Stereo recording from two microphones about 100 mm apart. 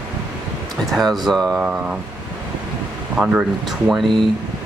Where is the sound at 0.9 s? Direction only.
Centre (ahead or behind).